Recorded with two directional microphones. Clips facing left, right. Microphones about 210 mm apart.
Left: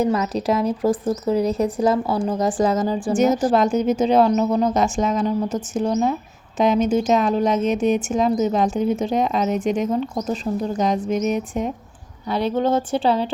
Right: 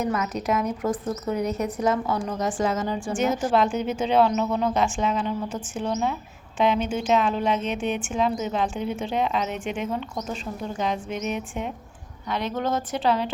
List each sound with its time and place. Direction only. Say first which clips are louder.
0.0 s a woman's voice: left 6 dB; 30° left (ahead or behind)